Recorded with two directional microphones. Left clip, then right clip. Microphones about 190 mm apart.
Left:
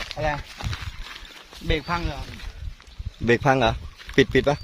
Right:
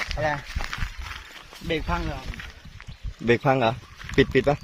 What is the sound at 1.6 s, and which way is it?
Speech, 30° left (ahead or behind).